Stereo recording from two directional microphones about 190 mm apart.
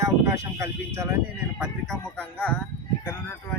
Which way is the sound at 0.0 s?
15° right (ahead or behind).